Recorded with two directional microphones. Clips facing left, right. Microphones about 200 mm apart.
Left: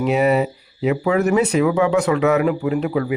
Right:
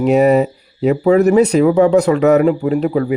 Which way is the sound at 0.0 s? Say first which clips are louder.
Right 6 dB; 40° right (ahead or behind).